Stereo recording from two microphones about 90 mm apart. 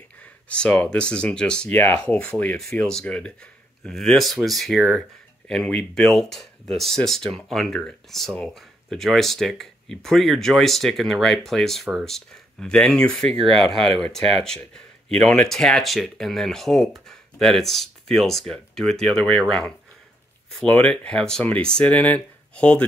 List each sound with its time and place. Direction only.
0.5 s speech: 15° left (ahead or behind)